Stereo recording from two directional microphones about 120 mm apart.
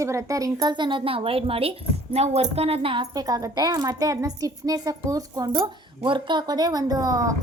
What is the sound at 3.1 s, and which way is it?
Speech, 30° right (ahead or behind).